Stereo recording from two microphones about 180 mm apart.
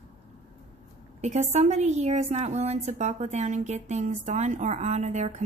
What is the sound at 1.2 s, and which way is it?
A woman's voice, 40° right (ahead or behind).